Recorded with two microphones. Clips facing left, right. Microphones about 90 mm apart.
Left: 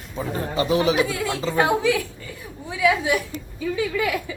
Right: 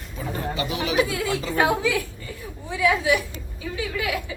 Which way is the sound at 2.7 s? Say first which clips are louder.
Left 2 dB; centre (ahead or behind).